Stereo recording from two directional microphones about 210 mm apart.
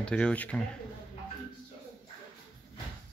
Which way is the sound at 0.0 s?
5° left (ahead or behind).